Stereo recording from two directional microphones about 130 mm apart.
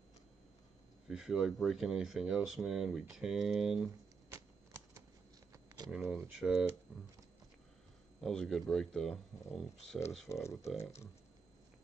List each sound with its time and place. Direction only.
1.0 s speech: 5° right (ahead or behind)
5.9 s speech: centre (ahead or behind)
8.2 s speech: 5° left (ahead or behind)
10.2 s speech: 20° left (ahead or behind)